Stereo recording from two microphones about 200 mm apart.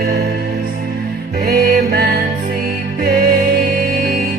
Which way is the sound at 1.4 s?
50° right (ahead or behind).